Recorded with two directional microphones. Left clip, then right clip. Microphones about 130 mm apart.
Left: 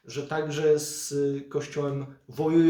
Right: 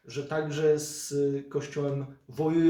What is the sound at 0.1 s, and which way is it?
Speech, 25° left (ahead or behind).